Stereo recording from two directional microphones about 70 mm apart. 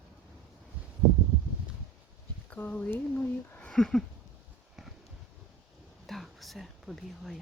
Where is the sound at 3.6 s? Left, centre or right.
Centre.